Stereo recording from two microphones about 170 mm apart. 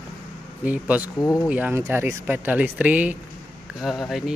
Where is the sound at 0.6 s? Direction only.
10° right (ahead or behind).